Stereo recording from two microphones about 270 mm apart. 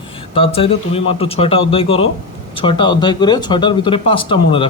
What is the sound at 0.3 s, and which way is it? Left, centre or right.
Speech, centre.